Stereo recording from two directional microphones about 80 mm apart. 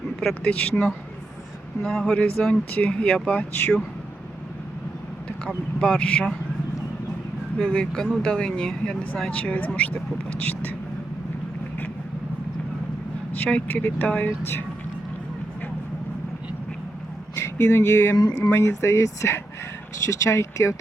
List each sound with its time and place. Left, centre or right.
0.4 s speech: centre
5.8 s speech: centre
7.6 s speech: centre
13.3 s speech: left
17.3 s speech: left